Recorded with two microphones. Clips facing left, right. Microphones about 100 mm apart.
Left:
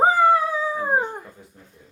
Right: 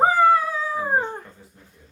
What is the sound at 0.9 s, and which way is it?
Dog, 10° left (ahead or behind).